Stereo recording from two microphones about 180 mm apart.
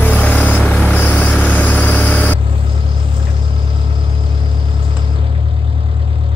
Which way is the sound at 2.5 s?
30° right (ahead or behind).